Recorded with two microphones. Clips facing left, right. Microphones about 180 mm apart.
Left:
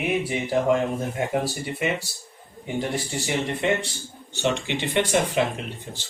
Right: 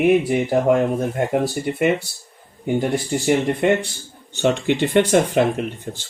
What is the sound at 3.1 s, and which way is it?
Speech, 55° right (ahead or behind).